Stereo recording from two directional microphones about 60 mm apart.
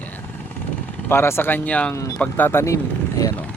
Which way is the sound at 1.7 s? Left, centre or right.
Left.